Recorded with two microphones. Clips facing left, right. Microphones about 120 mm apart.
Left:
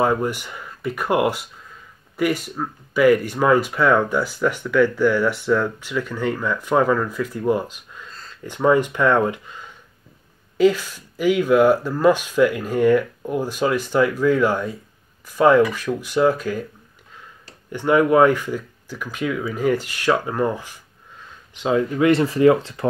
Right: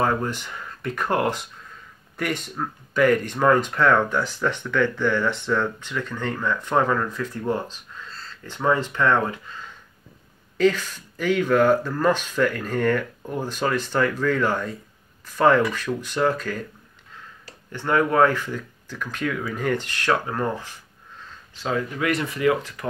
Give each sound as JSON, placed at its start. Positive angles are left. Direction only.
{"t": 0.0, "sound": "speech", "side_deg": 15}